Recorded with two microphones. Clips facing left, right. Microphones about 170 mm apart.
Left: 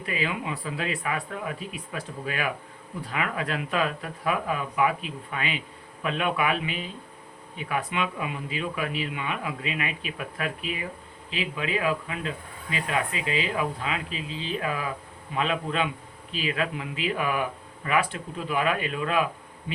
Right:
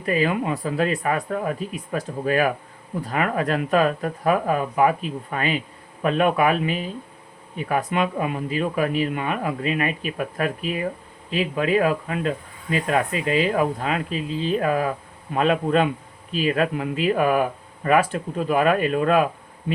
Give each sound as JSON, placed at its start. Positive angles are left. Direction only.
{"t": 0.0, "sound": "speech", "side_deg": -45}